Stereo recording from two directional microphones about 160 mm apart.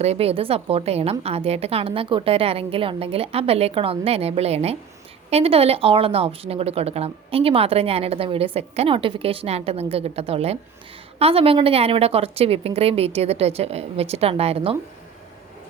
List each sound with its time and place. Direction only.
0.0 s speech: 40° right (ahead or behind)